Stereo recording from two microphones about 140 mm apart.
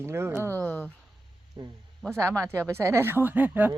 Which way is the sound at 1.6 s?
35° right (ahead or behind).